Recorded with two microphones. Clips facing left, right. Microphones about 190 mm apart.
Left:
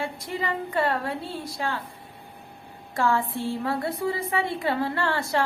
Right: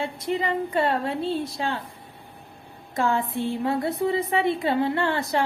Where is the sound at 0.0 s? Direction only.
25° right (ahead or behind).